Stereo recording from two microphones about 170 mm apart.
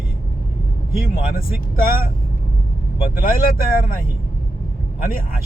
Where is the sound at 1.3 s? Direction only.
60° left (ahead or behind).